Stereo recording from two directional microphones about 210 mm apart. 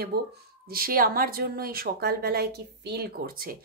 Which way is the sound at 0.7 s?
45° right (ahead or behind).